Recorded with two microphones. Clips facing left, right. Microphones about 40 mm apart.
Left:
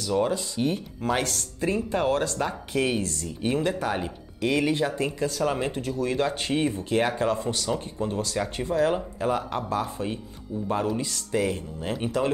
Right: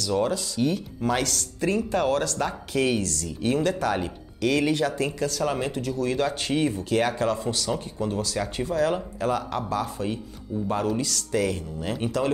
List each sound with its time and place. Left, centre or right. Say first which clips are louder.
0.0 s speech: even; left
1.7 s speech: right 1 dB; left